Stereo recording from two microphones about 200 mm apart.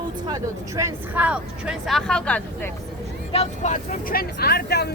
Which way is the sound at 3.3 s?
35° left (ahead or behind).